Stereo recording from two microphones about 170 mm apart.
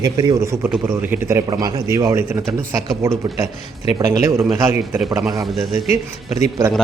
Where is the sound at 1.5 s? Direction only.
20° right (ahead or behind).